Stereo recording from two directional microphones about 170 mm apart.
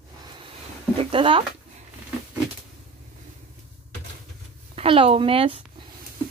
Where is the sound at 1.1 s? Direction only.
30° right (ahead or behind).